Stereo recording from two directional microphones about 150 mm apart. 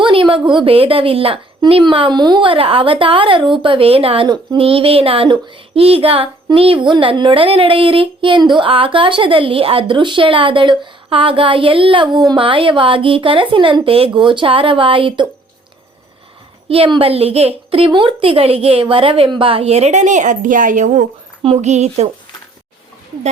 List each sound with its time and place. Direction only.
0.0 s a woman's voice: 35° right (ahead or behind)
16.6 s a woman's voice: 40° right (ahead or behind)